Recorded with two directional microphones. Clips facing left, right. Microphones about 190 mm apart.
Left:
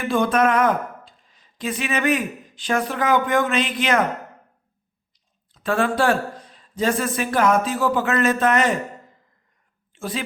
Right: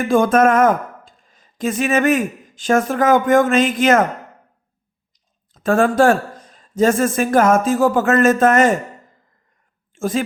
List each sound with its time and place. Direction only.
0.0 s speech: 45° right (ahead or behind)
5.5 s speech: 45° right (ahead or behind)
9.9 s speech: 45° right (ahead or behind)